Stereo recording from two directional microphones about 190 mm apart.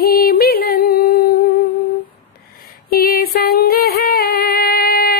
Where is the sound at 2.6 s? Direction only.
50° left (ahead or behind).